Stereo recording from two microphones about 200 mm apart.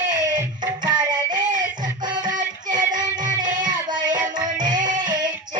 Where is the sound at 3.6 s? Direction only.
20° right (ahead or behind).